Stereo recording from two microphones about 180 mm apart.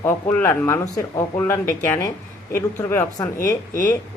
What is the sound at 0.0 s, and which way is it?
Speech, 10° left (ahead or behind).